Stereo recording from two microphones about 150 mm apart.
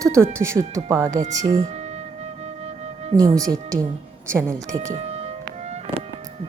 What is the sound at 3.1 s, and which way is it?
A woman's voice, 25° right (ahead or behind).